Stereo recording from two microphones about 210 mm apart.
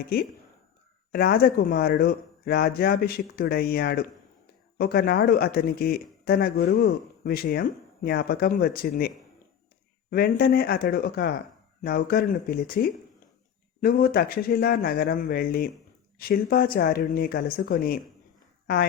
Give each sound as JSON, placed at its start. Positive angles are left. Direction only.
{"t": 1.1, "sound": "speech", "side_deg": 45}